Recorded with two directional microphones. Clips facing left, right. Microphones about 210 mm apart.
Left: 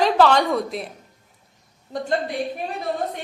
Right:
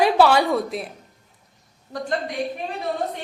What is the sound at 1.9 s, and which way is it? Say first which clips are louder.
Speech: left 2 dB; 25° left (ahead or behind).